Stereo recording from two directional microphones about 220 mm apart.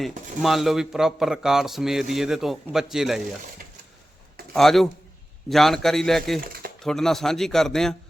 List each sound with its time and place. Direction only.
0.4 s a man's voice: centre (ahead or behind)
4.5 s a man's voice: centre (ahead or behind)
6.4 s a sound: 40° right (ahead or behind)
6.8 s a man's voice: centre (ahead or behind)